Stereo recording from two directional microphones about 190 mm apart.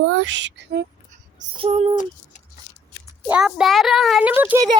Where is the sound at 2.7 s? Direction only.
45° left (ahead or behind).